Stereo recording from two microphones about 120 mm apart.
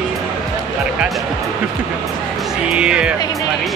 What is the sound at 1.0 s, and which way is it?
Speech, centre (ahead or behind).